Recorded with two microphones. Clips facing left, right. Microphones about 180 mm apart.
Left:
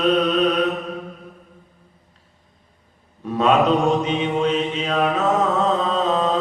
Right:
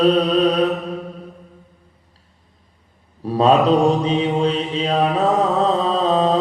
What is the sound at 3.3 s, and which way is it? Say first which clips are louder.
Mantra: right 3 dB; 35° right (ahead or behind).